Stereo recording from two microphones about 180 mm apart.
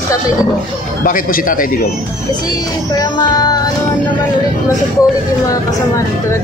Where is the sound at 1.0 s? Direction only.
50° left (ahead or behind).